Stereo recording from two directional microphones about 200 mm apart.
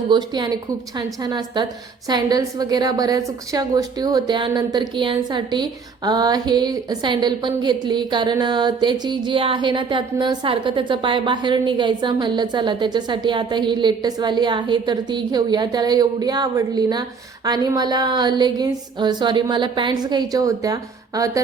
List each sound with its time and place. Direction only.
0.1 s a woman's voice: 20° right (ahead or behind)